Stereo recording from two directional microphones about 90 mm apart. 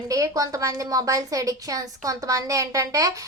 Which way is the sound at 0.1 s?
40° right (ahead or behind).